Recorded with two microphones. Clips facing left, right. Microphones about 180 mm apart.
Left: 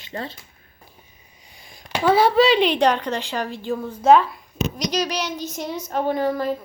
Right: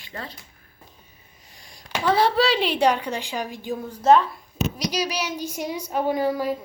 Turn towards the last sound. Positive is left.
turn(degrees=-10)  # may be behind; listen again after turning